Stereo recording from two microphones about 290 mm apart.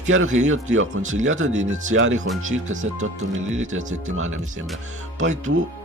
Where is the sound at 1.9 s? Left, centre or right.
Right.